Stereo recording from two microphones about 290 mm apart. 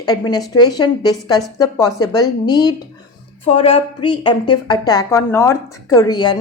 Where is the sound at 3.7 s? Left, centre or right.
Centre.